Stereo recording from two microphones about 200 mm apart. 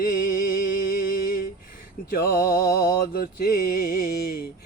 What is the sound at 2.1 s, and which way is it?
Mantra, 45° left (ahead or behind).